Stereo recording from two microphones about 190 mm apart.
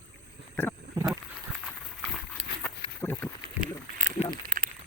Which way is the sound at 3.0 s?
10° left (ahead or behind).